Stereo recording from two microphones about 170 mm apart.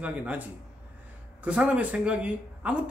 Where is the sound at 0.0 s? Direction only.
10° right (ahead or behind).